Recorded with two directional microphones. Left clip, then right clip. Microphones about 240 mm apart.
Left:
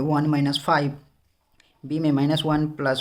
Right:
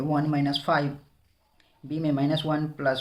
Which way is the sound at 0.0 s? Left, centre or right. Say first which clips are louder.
Left 3 dB; left.